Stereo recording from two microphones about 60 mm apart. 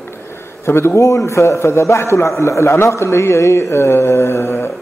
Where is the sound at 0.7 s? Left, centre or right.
Left.